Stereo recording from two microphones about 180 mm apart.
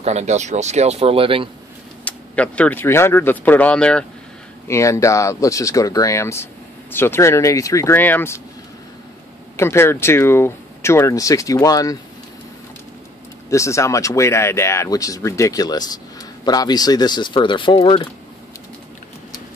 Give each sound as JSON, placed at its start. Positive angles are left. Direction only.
{"t": 0.0, "sound": "speech", "side_deg": -40}
{"t": 2.0, "sound": "speech", "side_deg": 5}
{"t": 4.6, "sound": "speech", "side_deg": 15}
{"t": 9.6, "sound": "speech", "side_deg": 15}
{"t": 13.5, "sound": "speech", "side_deg": 15}